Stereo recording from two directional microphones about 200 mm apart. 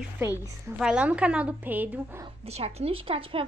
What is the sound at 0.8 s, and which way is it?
A woman's voice, 5° right (ahead or behind).